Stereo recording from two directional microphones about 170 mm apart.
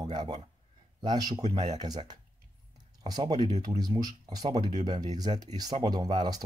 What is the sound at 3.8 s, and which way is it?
Speech, 25° right (ahead or behind).